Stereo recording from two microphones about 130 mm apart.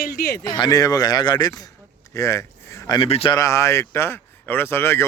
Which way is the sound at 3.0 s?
50° left (ahead or behind).